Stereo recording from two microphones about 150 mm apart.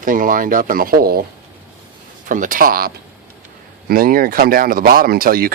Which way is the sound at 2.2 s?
65° right (ahead or behind).